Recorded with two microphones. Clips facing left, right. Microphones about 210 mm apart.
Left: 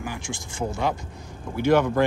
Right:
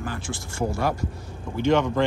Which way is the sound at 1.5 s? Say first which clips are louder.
Left 1 dB; 5° left (ahead or behind).